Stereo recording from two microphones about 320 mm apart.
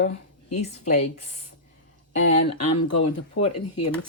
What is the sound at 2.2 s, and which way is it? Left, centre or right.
Speech, left.